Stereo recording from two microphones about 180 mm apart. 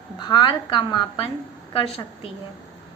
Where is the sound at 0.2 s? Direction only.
25° left (ahead or behind).